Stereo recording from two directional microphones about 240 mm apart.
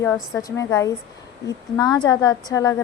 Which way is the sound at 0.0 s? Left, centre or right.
Centre.